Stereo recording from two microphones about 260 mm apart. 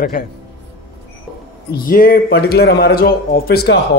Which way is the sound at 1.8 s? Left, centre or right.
Left.